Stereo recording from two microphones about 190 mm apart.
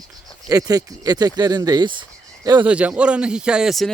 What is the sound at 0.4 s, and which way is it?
Speech, 20° right (ahead or behind).